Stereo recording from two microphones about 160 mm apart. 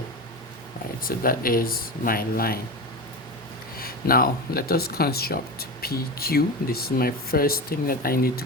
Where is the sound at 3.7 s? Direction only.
65° left (ahead or behind).